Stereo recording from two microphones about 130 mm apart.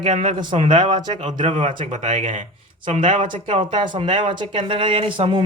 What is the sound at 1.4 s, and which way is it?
Speech, 50° right (ahead or behind).